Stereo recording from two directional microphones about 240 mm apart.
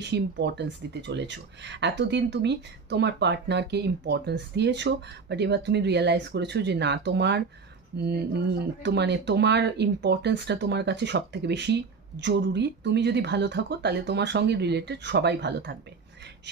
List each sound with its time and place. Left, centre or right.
0.0 s speech: right